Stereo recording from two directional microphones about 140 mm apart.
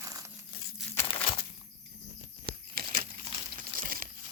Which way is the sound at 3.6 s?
90° right.